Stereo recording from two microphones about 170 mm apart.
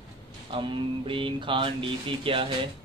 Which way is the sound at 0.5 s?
30° right (ahead or behind).